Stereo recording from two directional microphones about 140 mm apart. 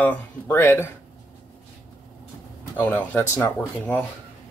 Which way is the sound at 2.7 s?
15° left (ahead or behind).